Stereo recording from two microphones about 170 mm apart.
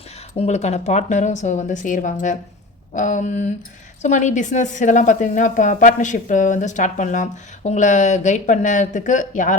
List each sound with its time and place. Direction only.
0.3 s speech: 40° left (ahead or behind)